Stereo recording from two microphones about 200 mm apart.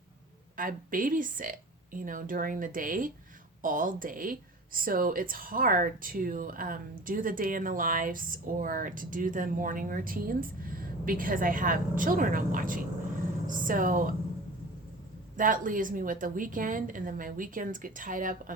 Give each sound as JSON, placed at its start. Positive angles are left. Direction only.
{"t": 0.5, "sound": "speech", "side_deg": -45}
{"t": 15.4, "sound": "speech", "side_deg": -40}